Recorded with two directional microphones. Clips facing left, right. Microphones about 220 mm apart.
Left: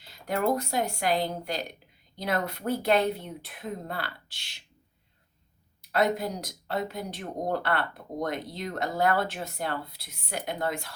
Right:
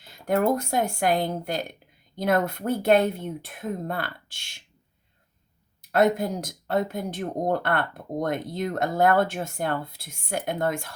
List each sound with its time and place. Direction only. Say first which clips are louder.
0.0 s speech: right 5 dB; 50° right (ahead or behind)
5.8 s speech: right 5 dB; 50° right (ahead or behind)